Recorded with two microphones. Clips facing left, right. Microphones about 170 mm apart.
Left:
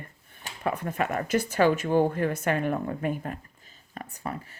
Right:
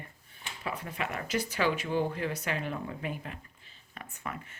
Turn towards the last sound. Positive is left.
turn(degrees=35)  # may be behind; listen again after turning